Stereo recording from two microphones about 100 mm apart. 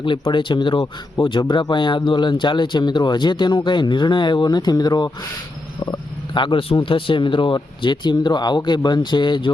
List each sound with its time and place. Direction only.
0.0 s speech: 55° left (ahead or behind)